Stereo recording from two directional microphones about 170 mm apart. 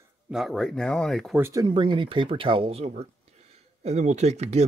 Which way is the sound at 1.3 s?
15° right (ahead or behind).